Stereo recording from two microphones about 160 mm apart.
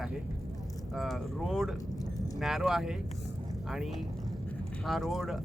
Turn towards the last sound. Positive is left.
turn(degrees=0)  # may be behind; listen again after turning